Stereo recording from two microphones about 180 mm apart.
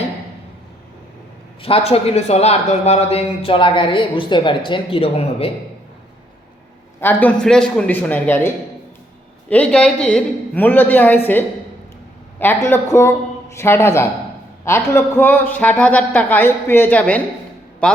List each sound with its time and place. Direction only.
1.6 s speech: 35° left (ahead or behind)
7.0 s a woman's voice: 10° left (ahead or behind)
12.5 s a woman's voice: 10° left (ahead or behind)